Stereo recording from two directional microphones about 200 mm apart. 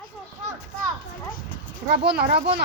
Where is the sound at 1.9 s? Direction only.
55° right (ahead or behind).